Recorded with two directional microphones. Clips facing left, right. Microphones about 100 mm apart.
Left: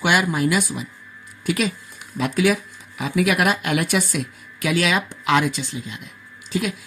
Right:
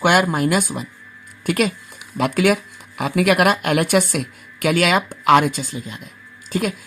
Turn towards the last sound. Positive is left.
turn(degrees=-50)  # may be behind; listen again after turning